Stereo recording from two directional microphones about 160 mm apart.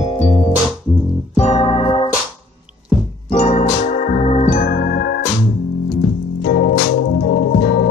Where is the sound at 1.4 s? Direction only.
40° left (ahead or behind).